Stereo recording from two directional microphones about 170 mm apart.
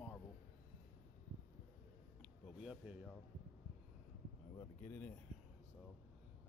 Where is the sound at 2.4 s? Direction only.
5° right (ahead or behind).